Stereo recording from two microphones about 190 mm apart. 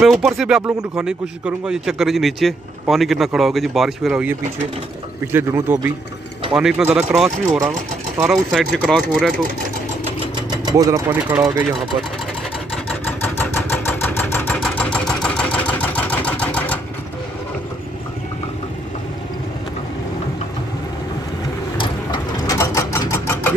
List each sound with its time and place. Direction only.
0.0 s speech: centre (ahead or behind)
7.4 s speech: 15° right (ahead or behind)
8.3 s speech: centre (ahead or behind)
10.3 s speech: 20° right (ahead or behind)
13.4 s engine: 10° left (ahead or behind)
21.7 s sewing machine: 25° left (ahead or behind)